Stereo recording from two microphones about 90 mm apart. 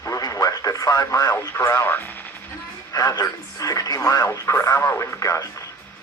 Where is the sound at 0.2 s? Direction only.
40° left (ahead or behind).